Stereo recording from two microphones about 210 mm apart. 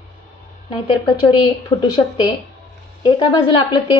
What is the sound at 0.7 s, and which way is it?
Speech, 20° left (ahead or behind).